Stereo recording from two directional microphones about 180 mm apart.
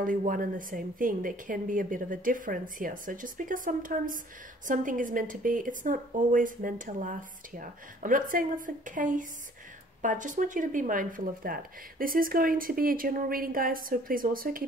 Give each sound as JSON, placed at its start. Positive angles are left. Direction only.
{"t": 0.0, "sound": "speech", "side_deg": -50}